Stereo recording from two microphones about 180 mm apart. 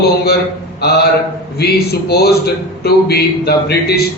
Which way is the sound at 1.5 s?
60° left (ahead or behind).